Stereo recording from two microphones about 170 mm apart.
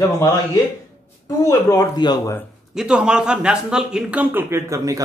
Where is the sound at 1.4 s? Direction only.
20° left (ahead or behind).